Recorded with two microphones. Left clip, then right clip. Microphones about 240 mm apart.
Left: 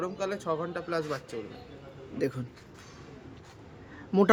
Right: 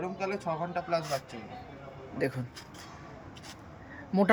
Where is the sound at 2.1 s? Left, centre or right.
Centre.